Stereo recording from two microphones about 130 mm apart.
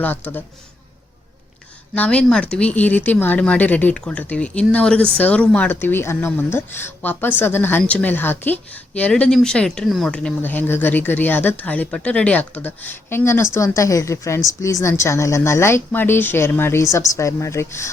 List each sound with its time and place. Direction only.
0.0 s speech: 15° left (ahead or behind)
2.0 s a woman's voice: 10° left (ahead or behind)